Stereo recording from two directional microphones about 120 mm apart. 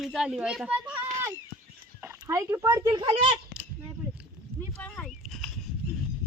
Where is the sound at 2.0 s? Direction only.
20° right (ahead or behind); by 3.3 s 40° right (ahead or behind).